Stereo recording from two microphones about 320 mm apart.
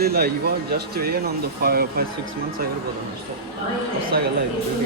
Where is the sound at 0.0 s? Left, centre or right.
Right.